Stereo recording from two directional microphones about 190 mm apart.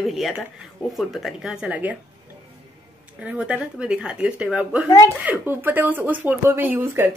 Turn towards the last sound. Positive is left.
turn(degrees=-10)  # may be behind; listen again after turning